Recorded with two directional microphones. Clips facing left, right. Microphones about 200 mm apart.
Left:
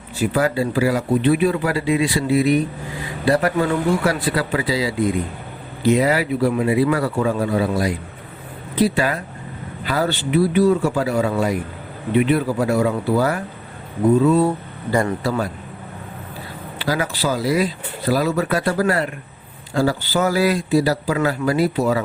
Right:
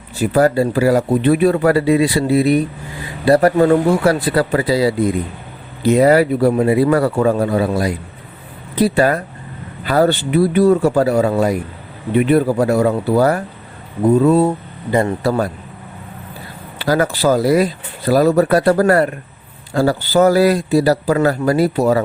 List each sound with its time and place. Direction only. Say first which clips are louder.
0.2 s speech: right 5 dB; 40° right (ahead or behind)
14.3 s speech: right 3 dB; 20° right (ahead or behind)
15.2 s speech: right 5 dB; 40° right (ahead or behind)
16.8 s speech: right 7 dB; 50° right (ahead or behind)